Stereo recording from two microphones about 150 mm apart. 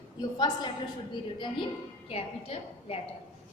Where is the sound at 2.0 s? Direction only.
40° left (ahead or behind).